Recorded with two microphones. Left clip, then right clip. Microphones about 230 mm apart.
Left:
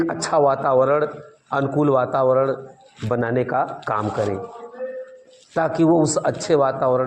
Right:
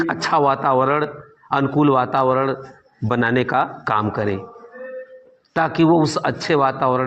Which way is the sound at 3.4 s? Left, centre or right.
Right.